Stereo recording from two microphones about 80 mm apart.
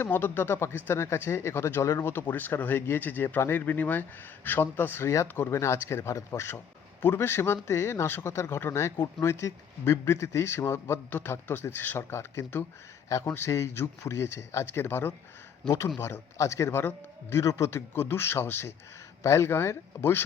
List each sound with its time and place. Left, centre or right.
0.0 s a man's voice: left
15.6 s speech: centre
16.0 s a man's voice: left